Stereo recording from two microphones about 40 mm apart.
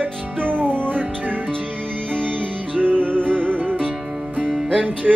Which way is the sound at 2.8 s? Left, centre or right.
Right.